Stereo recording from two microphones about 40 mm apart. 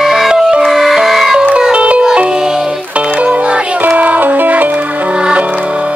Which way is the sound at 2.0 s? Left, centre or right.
Right.